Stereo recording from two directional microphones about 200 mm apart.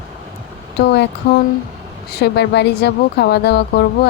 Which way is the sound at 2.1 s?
55° left (ahead or behind).